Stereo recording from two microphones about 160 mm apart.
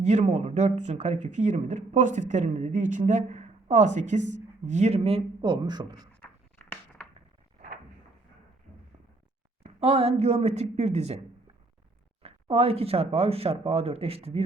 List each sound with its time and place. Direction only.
0.0 s speech: 45° right (ahead or behind); by 6.1 s 25° right (ahead or behind)
6.6 s a sound: 10° left (ahead or behind)
9.6 s speech: 40° right (ahead or behind)
12.2 s speech: 40° right (ahead or behind)